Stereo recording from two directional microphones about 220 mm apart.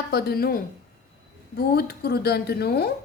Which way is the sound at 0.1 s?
45° left (ahead or behind).